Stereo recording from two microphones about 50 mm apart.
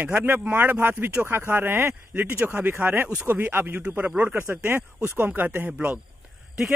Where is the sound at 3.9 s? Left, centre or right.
Right.